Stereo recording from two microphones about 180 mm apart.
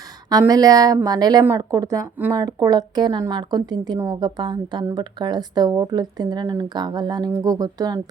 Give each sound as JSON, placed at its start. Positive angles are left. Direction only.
{"t": 0.3, "sound": "a woman's voice", "side_deg": -20}